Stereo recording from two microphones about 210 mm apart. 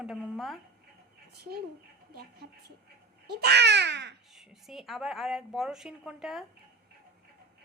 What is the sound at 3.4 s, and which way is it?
Speech, 55° right (ahead or behind).